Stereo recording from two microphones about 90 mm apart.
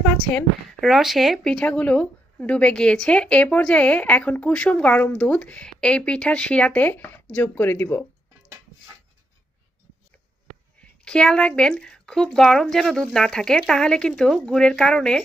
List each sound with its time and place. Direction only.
0.0 s a woman's voice: 10° left (ahead or behind)
10.8 s a woman's voice: 10° left (ahead or behind)